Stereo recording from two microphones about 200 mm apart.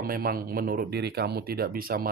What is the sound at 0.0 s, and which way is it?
Speech, 50° right (ahead or behind).